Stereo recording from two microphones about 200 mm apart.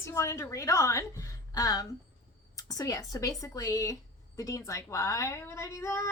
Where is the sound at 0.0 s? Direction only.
15° left (ahead or behind).